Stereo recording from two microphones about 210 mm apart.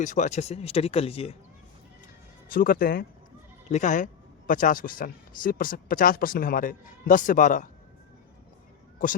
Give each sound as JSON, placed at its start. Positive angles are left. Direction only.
{"t": 0.0, "sound": "speech", "side_deg": 35}
{"t": 2.5, "sound": "speech", "side_deg": 45}